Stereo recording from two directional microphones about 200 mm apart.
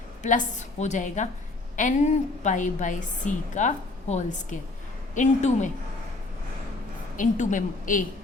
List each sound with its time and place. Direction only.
0.2 s a woman's voice: 40° left (ahead or behind)
7.2 s a woman's voice: 40° left (ahead or behind)